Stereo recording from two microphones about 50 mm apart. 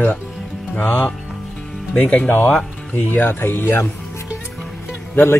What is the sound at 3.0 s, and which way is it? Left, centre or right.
Speech, left.